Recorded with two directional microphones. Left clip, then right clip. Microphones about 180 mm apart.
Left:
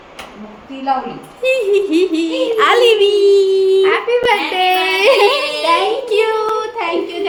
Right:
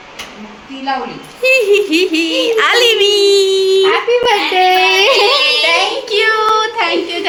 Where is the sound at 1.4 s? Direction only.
Centre (ahead or behind).